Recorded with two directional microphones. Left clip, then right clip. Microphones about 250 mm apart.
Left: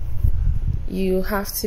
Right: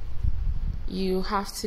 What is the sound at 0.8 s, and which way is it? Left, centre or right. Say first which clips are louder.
Speech: left 5 dB; centre.